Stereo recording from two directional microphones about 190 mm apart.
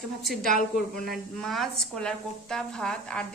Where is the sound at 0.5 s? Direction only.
50° left (ahead or behind).